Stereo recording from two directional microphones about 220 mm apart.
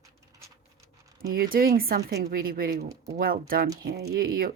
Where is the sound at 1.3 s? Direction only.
40° right (ahead or behind).